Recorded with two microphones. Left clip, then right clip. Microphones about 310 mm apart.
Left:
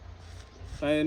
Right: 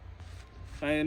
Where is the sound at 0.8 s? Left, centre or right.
Centre.